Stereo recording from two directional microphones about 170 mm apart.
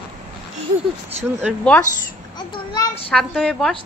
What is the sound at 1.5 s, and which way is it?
Speech, 5° right (ahead or behind).